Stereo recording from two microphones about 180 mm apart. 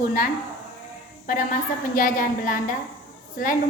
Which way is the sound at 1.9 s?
50° left (ahead or behind).